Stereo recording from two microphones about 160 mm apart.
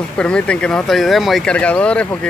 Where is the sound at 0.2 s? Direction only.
5° left (ahead or behind).